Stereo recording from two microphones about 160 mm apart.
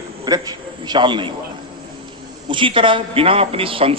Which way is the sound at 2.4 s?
30° right (ahead or behind).